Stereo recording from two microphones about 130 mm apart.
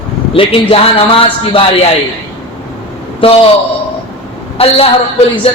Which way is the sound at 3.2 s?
45° left (ahead or behind).